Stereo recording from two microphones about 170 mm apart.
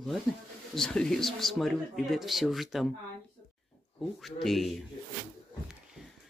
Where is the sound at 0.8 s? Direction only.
5° left (ahead or behind).